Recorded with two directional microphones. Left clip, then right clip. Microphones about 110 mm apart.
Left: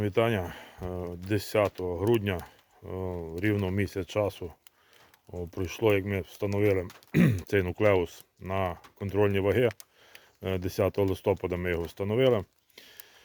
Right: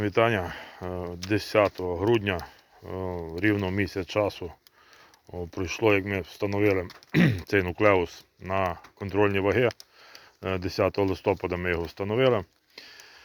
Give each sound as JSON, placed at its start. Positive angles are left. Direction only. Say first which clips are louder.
{"t": 0.0, "sound": "speech", "louder": "right 3 dB", "side_deg": 20}